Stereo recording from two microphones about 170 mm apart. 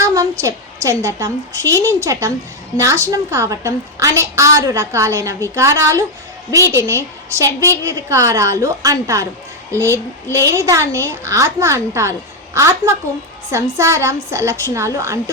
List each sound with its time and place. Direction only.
0.0 s a woman's voice: 20° right (ahead or behind)